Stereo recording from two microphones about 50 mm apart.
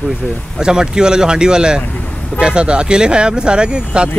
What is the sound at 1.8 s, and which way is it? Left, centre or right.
Vehicle, left.